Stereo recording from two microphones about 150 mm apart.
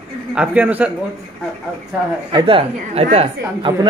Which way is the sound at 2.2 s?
35° right (ahead or behind).